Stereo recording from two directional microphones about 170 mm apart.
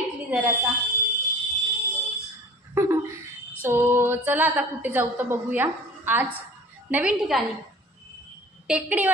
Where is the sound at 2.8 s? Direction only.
15° right (ahead or behind).